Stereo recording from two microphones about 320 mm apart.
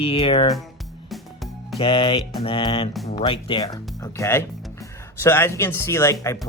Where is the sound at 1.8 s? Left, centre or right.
Centre.